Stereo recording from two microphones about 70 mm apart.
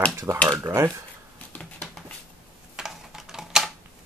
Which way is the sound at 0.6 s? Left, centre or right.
Right.